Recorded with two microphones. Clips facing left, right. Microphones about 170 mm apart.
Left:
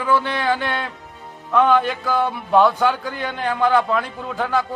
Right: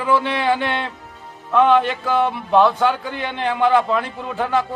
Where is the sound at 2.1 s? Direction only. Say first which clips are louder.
Right 2 dB; 20° right (ahead or behind).